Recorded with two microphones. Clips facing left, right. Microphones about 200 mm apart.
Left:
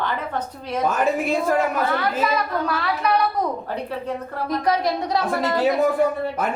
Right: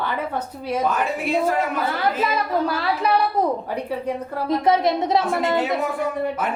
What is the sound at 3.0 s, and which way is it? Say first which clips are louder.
Speech: even; 30° right (ahead or behind).